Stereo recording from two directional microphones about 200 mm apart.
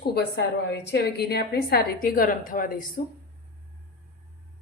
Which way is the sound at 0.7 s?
55° left (ahead or behind).